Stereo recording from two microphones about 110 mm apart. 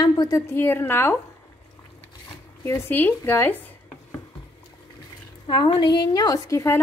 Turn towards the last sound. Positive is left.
turn(degrees=25)  # may be behind; listen again after turning